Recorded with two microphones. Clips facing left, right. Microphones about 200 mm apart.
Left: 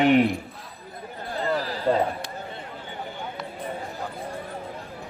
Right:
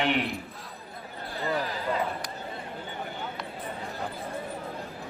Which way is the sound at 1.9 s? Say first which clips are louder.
Left 9 dB; 35° left (ahead or behind).